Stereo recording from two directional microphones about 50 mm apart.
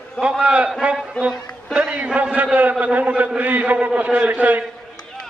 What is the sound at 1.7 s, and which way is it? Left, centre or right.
A man's voice, right.